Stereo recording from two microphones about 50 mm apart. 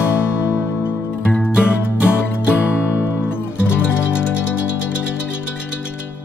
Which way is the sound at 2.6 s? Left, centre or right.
Left.